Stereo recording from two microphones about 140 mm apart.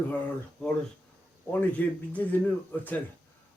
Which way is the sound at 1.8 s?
10° left (ahead or behind).